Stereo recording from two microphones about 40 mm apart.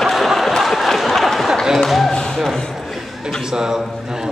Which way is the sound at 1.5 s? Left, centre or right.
Centre.